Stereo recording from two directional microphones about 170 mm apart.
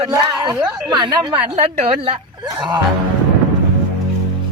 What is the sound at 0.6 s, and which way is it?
Speech, 5° right (ahead or behind).